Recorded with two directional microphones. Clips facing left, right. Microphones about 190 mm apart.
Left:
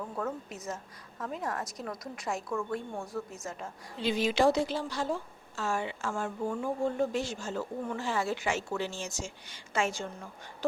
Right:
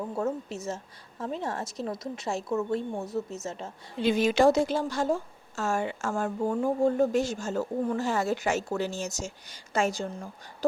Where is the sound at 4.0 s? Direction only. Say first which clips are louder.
Right 5 dB; 50° right (ahead or behind).